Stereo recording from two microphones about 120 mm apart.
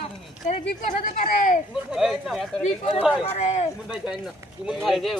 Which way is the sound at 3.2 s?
65° left (ahead or behind).